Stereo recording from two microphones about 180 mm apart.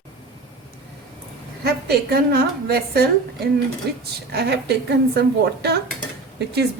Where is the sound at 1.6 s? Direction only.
60° right (ahead or behind).